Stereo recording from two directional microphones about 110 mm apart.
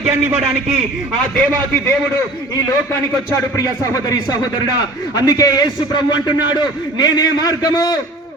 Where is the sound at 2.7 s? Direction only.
30° left (ahead or behind).